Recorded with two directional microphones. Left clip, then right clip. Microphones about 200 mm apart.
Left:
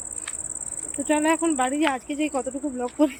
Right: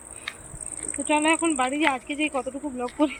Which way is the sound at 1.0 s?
20° left (ahead or behind).